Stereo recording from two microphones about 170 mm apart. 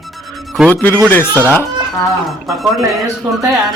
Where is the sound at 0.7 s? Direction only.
10° left (ahead or behind).